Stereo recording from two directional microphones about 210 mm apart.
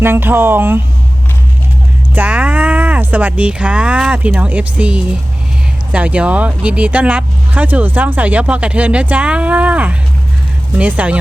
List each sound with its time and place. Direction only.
0.0 s speech: 10° right (ahead or behind)
2.1 s speech: 5° right (ahead or behind)